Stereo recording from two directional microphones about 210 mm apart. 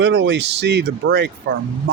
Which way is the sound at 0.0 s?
55° right (ahead or behind).